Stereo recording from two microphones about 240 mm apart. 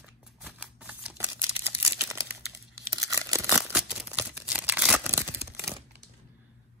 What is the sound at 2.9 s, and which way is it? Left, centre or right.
Tearing, centre.